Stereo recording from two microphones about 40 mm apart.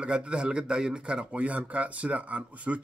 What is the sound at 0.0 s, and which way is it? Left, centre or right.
Speech, right.